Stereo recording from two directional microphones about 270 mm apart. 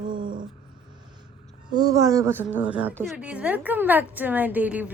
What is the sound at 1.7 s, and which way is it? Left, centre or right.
A woman's voice, centre.